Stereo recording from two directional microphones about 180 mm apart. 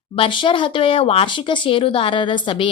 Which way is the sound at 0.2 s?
30° left (ahead or behind).